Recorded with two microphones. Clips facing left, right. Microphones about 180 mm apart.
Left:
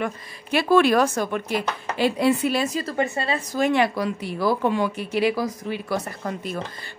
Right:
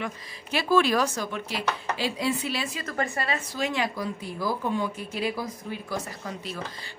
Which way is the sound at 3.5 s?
60° left (ahead or behind).